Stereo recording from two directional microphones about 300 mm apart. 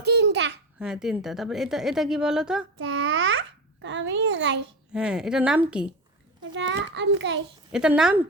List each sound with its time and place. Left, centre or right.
0.0 s babbling: right
0.8 s a woman's voice: centre
2.7 s a child's voice: right
4.9 s a woman's voice: centre
6.5 s a child's voice: right
7.7 s a woman's voice: centre